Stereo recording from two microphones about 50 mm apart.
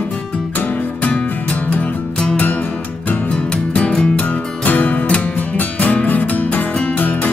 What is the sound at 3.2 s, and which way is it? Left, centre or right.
Music, left.